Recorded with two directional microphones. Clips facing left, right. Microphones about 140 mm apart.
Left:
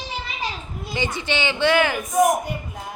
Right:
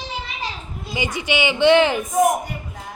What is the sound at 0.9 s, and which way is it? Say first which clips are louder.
Speech: right 2 dB; 15° right (ahead or behind).